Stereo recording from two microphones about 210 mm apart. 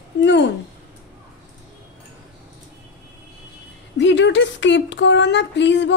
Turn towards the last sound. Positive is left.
turn(degrees=55)  # may be behind; listen again after turning